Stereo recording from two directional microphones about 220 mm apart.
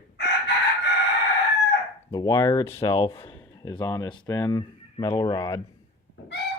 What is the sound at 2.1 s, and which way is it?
Speech, 15° left (ahead or behind).